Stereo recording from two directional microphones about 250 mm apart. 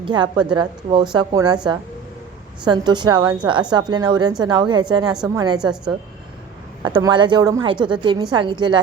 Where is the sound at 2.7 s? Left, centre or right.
Centre.